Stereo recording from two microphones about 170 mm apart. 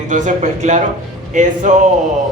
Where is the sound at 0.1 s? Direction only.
45° right (ahead or behind).